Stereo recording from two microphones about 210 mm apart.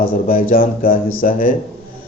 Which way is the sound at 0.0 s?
45° left (ahead or behind).